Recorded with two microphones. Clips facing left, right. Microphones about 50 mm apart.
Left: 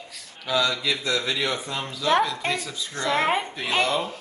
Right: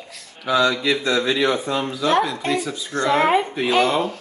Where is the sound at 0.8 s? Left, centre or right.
Right.